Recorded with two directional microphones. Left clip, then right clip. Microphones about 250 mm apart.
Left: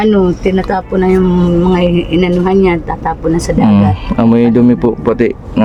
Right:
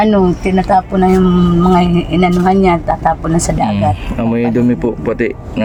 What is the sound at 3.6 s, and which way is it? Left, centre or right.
Speech, left.